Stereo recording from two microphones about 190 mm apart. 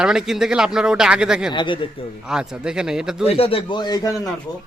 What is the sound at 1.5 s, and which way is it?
Speech, 25° left (ahead or behind).